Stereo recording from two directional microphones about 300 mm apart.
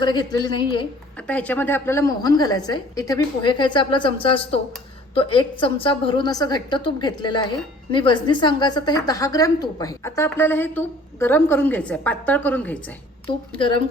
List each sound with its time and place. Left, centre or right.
0.0 s a woman's voice: centre
1.3 s a woman's voice: centre
13.5 s a woman's voice: centre